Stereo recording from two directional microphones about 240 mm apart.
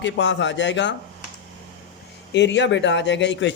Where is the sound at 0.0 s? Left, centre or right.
Left.